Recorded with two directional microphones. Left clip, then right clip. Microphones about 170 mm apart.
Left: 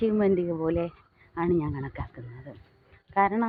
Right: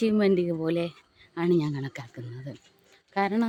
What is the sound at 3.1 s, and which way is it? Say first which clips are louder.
Speech: left 3 dB; 90° right.